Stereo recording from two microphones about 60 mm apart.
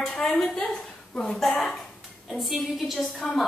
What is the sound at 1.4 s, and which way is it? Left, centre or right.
A woman's voice, centre.